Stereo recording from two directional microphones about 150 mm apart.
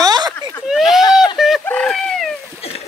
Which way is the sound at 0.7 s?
Centre (ahead or behind).